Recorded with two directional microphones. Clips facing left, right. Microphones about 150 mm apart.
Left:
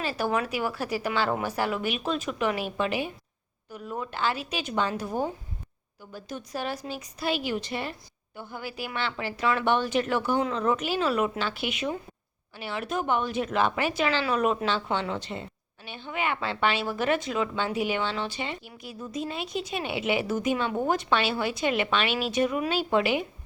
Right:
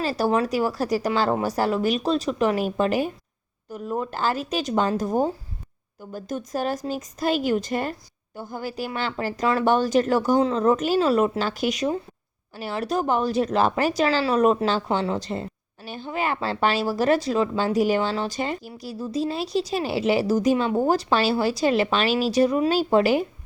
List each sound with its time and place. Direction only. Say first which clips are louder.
0.0 s speech: right 5 dB; 35° right (ahead or behind)